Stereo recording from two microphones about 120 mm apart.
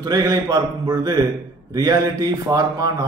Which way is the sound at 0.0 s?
30° right (ahead or behind).